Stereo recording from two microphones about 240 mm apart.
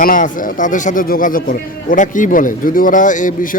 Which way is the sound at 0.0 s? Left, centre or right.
Left.